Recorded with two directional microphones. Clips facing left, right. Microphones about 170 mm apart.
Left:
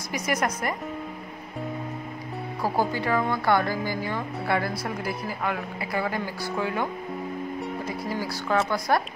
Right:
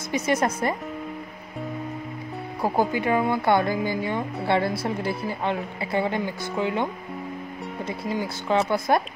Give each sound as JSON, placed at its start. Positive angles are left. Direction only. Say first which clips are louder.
{"t": 0.1, "sound": "speech", "louder": "right 4 dB", "side_deg": -25}
{"t": 2.6, "sound": "speech", "louder": "right 3 dB", "side_deg": -20}